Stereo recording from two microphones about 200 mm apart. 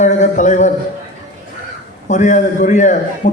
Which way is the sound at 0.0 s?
35° left (ahead or behind).